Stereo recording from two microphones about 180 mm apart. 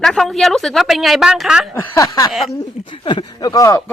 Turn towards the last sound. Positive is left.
turn(degrees=20)  # may be behind; listen again after turning